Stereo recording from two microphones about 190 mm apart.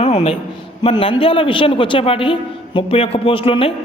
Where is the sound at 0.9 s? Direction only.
30° left (ahead or behind).